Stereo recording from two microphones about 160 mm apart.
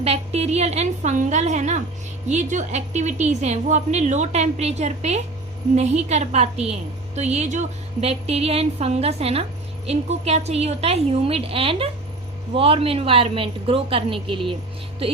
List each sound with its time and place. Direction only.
0.0 s a woman's voice: 40° right (ahead or behind)